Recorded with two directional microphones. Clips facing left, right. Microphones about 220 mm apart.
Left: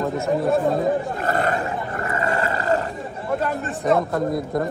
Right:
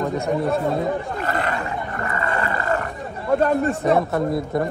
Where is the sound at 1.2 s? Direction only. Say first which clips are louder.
Left 3 dB; 45° left (ahead or behind).